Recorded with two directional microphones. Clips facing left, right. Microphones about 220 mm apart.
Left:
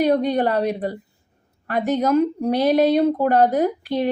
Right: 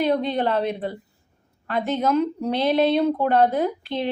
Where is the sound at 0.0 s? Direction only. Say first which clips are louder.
Left 3 dB; 45° left (ahead or behind).